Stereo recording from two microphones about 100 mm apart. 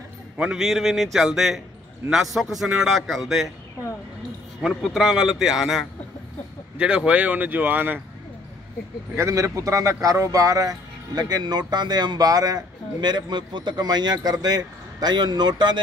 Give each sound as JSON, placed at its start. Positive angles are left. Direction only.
{"t": 0.4, "sound": "a man's voice", "side_deg": -5}
{"t": 4.8, "sound": "a man's voice", "side_deg": 0}
{"t": 9.1, "sound": "a man's voice", "side_deg": -30}